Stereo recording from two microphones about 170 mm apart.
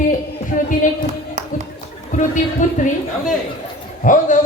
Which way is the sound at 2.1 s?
45° left (ahead or behind).